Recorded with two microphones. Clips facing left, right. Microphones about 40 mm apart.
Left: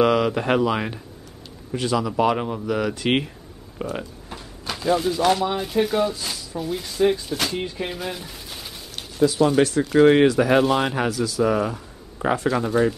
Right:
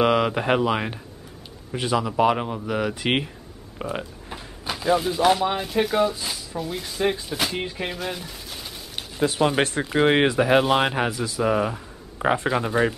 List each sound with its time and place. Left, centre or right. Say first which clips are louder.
0.0 s speech: left 1 dB; centre
3.7 s a sound: left 1 dB; centre
5.8 s speech: even; centre
7.9 s speech: even; centre
9.2 s speech: left 3 dB; right
9.8 s speech: left 4 dB; right